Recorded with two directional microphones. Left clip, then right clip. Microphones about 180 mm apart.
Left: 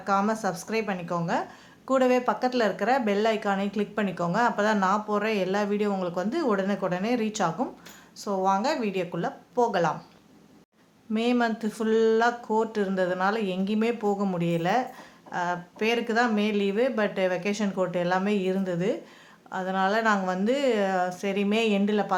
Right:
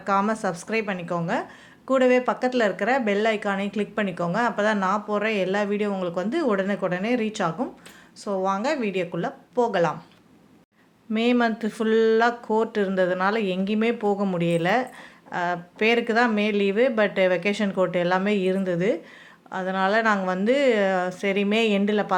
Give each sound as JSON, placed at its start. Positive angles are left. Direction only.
{"t": 0.0, "sound": "speech", "side_deg": -10}
{"t": 11.1, "sound": "speech", "side_deg": -15}